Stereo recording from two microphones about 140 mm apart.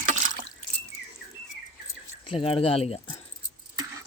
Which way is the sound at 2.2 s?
40° left (ahead or behind).